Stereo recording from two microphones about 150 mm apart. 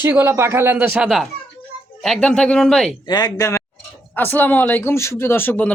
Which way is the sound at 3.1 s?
25° left (ahead or behind).